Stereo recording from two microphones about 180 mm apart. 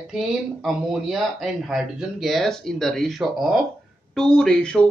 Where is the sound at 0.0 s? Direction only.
Centre (ahead or behind).